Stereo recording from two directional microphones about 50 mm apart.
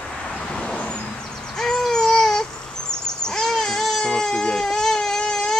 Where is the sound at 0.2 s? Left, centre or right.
Centre.